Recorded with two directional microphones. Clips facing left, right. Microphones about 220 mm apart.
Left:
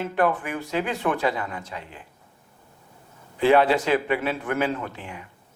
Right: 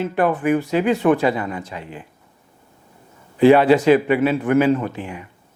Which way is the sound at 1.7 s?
15° right (ahead or behind).